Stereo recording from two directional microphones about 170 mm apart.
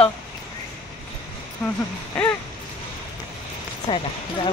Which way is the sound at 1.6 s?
5° left (ahead or behind).